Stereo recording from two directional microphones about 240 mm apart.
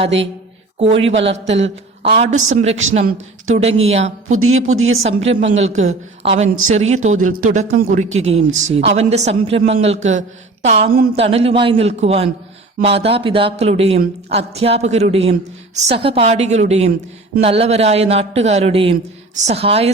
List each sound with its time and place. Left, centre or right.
0.8 s a woman's voice: right
4.3 s speech: right
5.0 s speech: right